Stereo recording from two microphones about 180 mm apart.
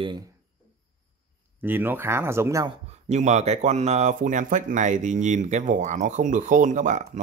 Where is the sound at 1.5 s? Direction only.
10° right (ahead or behind).